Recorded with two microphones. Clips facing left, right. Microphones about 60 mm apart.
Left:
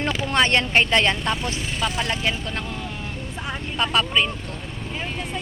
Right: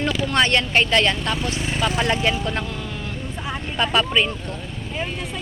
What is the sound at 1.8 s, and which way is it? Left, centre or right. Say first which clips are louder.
Speech: right 4 dB; centre.